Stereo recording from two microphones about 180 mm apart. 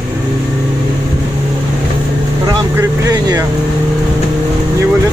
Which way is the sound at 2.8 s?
20° right (ahead or behind).